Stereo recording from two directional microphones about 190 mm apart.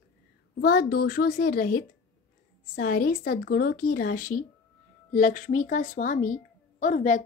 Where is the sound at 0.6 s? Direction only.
55° left (ahead or behind).